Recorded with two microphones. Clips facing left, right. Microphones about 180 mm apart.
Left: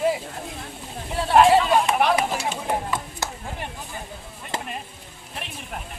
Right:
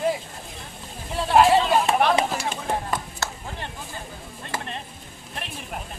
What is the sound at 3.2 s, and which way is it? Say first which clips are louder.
Chop: left 1 dB; 15° left (ahead or behind).